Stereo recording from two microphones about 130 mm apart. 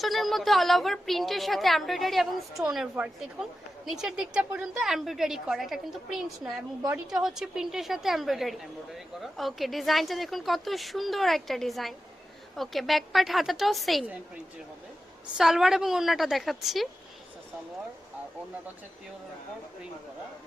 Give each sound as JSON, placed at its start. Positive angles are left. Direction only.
{"t": 0.0, "sound": "a woman's voice", "side_deg": 0}
{"t": 15.4, "sound": "a woman's voice", "side_deg": -5}